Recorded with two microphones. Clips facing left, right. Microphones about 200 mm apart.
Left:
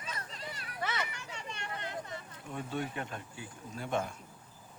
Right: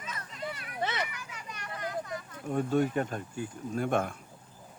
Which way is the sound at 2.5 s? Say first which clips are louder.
Right 10 dB; 45° right (ahead or behind).